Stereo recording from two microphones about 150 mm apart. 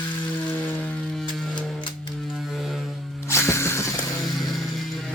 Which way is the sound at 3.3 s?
20° left (ahead or behind).